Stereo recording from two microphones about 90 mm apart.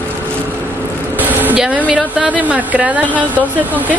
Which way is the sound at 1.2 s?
20° right (ahead or behind).